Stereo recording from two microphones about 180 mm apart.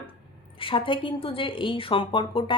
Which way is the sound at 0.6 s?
30° left (ahead or behind).